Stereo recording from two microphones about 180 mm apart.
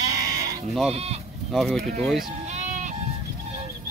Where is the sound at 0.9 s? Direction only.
35° right (ahead or behind).